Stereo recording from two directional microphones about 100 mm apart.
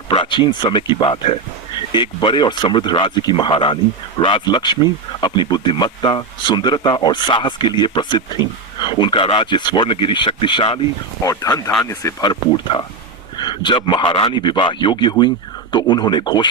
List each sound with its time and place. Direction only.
0.1 s speech: 50° left (ahead or behind)
11.2 s speech: 35° left (ahead or behind)
12.2 s speech: 50° left (ahead or behind)